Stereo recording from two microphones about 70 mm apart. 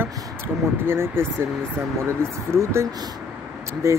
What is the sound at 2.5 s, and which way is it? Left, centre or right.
Speech, right.